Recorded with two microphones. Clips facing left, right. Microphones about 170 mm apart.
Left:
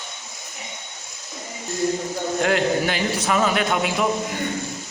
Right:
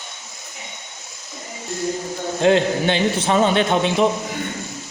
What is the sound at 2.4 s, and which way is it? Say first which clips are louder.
A man's voice: right 4 dB; 25° right (ahead or behind).